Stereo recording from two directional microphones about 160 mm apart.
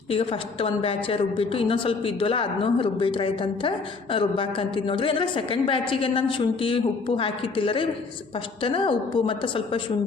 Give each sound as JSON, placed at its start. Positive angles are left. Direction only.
{"t": 0.1, "sound": "a woman's voice", "side_deg": 35}